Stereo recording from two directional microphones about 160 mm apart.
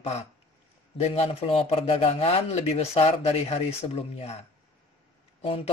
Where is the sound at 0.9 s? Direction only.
40° left (ahead or behind).